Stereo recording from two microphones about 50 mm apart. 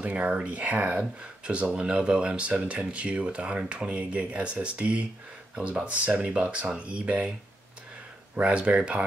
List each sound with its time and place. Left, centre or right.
0.0 s speech: right
8.4 s speech: right